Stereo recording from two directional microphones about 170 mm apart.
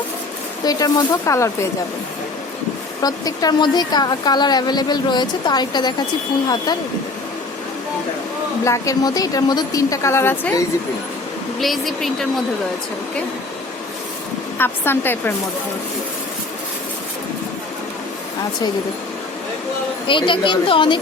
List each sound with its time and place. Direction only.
0.6 s a woman's voice: 20° left (ahead or behind)
3.0 s a woman's voice: 20° left (ahead or behind)
8.6 s a woman's voice: 20° left (ahead or behind)
11.6 s a woman's voice: centre (ahead or behind)
14.6 s speech: 10° left (ahead or behind)
20.1 s a woman's voice: 30° left (ahead or behind)